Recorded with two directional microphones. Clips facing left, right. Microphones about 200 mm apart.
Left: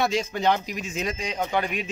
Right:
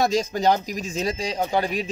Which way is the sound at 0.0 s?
40° right (ahead or behind).